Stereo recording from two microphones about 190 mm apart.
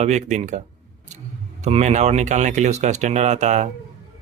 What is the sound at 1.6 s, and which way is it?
Speech, 35° right (ahead or behind).